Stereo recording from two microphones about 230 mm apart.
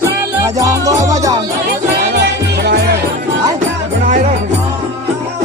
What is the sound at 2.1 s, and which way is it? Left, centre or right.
Music, right.